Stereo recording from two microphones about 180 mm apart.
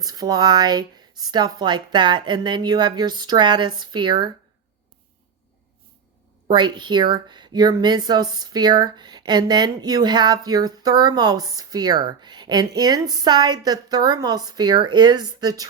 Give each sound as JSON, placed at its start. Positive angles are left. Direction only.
{"t": 0.0, "sound": "speech", "side_deg": -20}
{"t": 6.5, "sound": "speech", "side_deg": -25}